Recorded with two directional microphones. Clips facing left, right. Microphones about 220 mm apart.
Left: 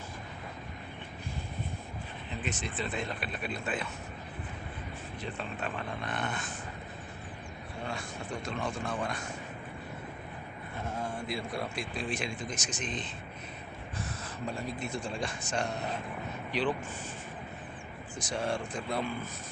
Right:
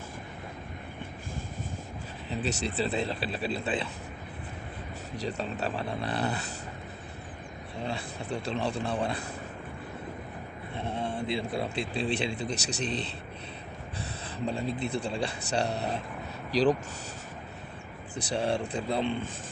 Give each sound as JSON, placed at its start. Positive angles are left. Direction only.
{"t": 2.3, "sound": "speech", "side_deg": -35}
{"t": 5.2, "sound": "speech", "side_deg": -40}
{"t": 7.9, "sound": "speech", "side_deg": -35}
{"t": 10.8, "sound": "a sound", "side_deg": -35}
{"t": 11.5, "sound": "speech", "side_deg": -30}
{"t": 14.4, "sound": "speech", "side_deg": -30}
{"t": 18.1, "sound": "speech", "side_deg": -35}